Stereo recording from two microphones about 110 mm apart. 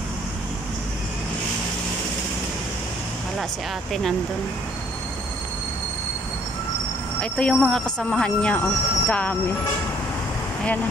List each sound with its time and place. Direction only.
7.2 s speech: 10° left (ahead or behind)